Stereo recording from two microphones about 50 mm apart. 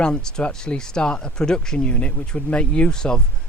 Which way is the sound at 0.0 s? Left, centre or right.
Centre.